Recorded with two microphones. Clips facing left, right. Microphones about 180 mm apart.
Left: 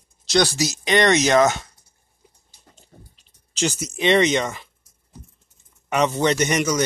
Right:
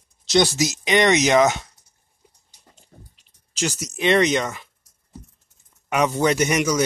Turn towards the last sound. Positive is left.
turn(degrees=-5)  # may be behind; listen again after turning